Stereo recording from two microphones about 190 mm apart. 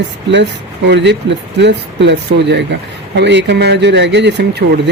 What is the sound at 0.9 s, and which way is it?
Speech, 65° right (ahead or behind).